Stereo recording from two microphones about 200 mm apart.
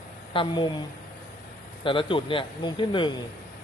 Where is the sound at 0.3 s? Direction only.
25° left (ahead or behind).